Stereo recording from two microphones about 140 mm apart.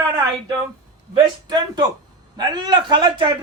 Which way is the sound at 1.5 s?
30° right (ahead or behind).